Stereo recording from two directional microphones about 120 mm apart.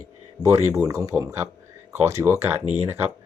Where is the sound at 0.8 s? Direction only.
30° right (ahead or behind).